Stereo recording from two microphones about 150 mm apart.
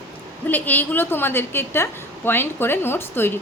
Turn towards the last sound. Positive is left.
turn(degrees=15)  # may be behind; listen again after turning